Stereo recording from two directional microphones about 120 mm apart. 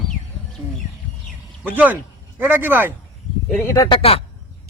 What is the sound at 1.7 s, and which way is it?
Speech, 15° right (ahead or behind).